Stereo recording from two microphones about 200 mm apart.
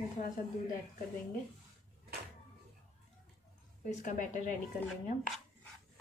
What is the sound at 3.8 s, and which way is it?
Speech, 40° left (ahead or behind).